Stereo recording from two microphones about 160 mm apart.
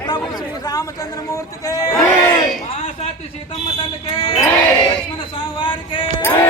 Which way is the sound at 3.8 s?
35° left (ahead or behind).